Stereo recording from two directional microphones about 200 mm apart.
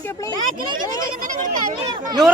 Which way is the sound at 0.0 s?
10° left (ahead or behind).